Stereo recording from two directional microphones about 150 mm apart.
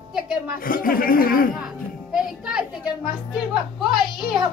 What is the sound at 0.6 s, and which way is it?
Speech, 70° left (ahead or behind).